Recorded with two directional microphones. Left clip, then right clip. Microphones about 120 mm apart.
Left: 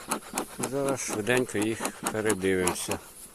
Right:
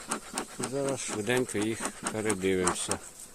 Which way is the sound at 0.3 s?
65° left (ahead or behind).